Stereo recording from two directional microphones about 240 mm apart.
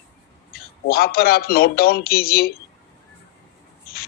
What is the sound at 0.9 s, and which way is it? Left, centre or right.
A man's voice, left.